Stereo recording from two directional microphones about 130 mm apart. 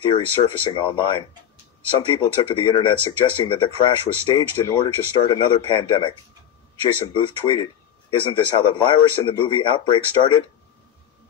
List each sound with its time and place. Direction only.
0.0 s a man's voice: 40° left (ahead or behind)
7.4 s a man's voice: 35° left (ahead or behind)